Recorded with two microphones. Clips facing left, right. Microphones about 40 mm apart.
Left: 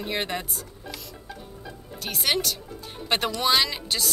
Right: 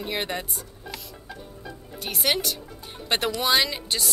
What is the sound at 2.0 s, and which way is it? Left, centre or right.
A woman's voice, centre.